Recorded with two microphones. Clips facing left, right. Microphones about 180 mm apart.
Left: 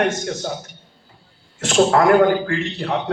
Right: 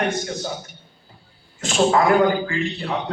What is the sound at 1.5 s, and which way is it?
Speech, 65° left (ahead or behind).